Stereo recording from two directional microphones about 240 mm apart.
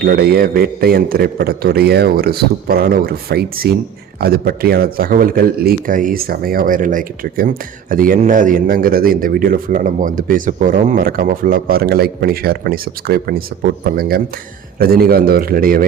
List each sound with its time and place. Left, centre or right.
0.0 s speech: right